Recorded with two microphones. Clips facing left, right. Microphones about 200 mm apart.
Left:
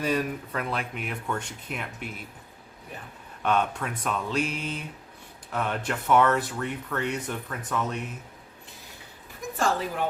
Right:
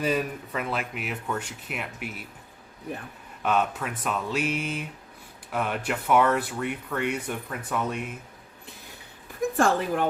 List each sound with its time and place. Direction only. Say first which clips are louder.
0.0 s speech: even; 5° right (ahead or behind)
3.4 s speech: even; 5° right (ahead or behind)
9.6 s speech: right 3 dB; 55° right (ahead or behind)